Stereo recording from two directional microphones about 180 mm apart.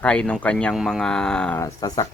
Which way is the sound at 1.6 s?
20° left (ahead or behind).